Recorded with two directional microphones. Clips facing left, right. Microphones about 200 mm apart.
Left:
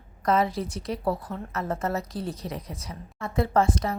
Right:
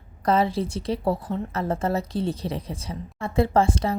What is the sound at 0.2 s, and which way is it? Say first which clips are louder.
A woman's voice: right 2 dB; 30° right (ahead or behind).